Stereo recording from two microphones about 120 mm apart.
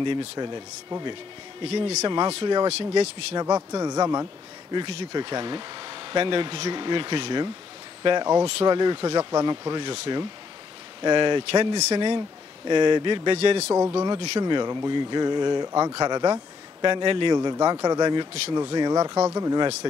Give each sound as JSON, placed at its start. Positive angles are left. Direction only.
{"t": 0.0, "sound": "speech", "side_deg": -40}
{"t": 1.6, "sound": "a man's voice", "side_deg": -50}
{"t": 2.0, "sound": "speech", "side_deg": -40}
{"t": 3.3, "sound": "a man's voice", "side_deg": -30}
{"t": 13.4, "sound": "a man's voice", "side_deg": -55}
{"t": 13.7, "sound": "speech", "side_deg": -20}
{"t": 14.4, "sound": "speech", "side_deg": -35}